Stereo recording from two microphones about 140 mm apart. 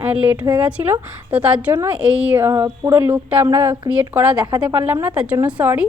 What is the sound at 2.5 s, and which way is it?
A woman's voice, 20° right (ahead or behind).